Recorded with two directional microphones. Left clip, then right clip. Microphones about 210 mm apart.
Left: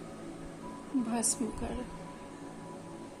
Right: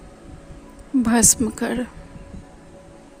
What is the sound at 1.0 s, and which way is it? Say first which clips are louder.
Speech: right 15 dB; 55° right (ahead or behind).